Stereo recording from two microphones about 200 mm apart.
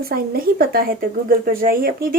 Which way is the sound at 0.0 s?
50° right (ahead or behind).